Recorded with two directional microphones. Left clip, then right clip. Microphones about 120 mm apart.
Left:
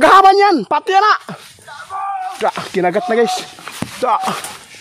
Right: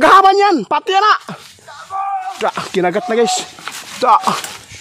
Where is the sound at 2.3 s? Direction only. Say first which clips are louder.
Even; 15° right (ahead or behind).